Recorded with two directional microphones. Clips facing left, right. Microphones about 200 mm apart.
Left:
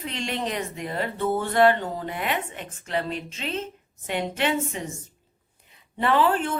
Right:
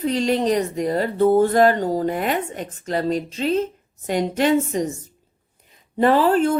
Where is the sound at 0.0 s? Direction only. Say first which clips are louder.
Right 10 dB; 35° right (ahead or behind).